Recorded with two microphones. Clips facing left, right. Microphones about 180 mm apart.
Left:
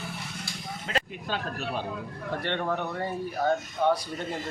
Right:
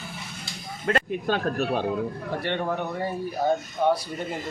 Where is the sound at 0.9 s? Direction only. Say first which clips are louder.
Right 8 dB; 55° right (ahead or behind).